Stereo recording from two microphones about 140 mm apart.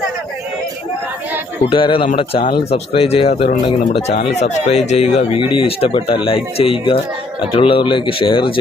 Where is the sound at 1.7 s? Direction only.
40° left (ahead or behind).